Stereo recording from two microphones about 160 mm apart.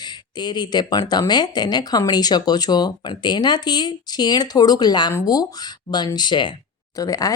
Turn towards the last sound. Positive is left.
turn(degrees=20)  # may be behind; listen again after turning